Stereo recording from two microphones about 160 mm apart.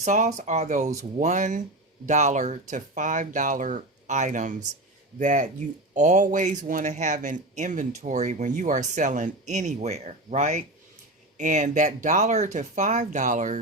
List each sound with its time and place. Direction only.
0.0 s speech: 45° right (ahead or behind)